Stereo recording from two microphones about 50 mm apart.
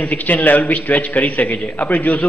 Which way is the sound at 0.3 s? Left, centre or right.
Left.